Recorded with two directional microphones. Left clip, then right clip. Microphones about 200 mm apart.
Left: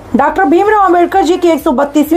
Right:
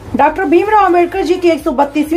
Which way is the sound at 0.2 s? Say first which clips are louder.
Left 1 dB; 20° left (ahead or behind).